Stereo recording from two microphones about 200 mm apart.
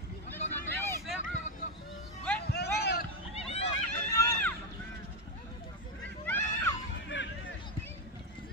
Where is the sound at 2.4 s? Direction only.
55° left (ahead or behind).